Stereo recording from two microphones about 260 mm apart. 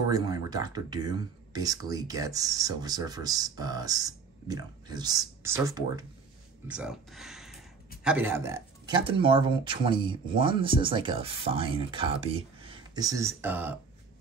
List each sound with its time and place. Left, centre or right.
0.1 s speech: centre